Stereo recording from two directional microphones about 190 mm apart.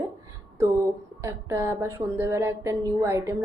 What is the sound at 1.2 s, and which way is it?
A woman's voice, 15° right (ahead or behind).